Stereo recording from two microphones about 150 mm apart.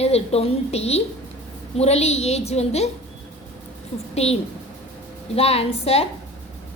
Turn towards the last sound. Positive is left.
turn(degrees=45)  # may be behind; listen again after turning